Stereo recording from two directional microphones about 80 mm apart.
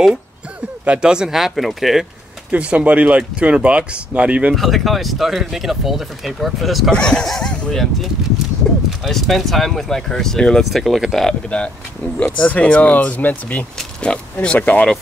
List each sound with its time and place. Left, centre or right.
0.8 s speech: centre
2.5 s speech: centre
4.6 s speech: centre
11.4 s speech: centre